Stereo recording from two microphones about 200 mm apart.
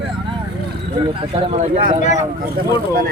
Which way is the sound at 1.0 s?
30° right (ahead or behind).